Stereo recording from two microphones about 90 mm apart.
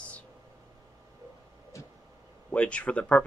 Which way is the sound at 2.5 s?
15° left (ahead or behind).